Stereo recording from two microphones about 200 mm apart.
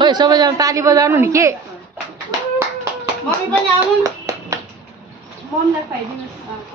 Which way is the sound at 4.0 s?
15° right (ahead or behind).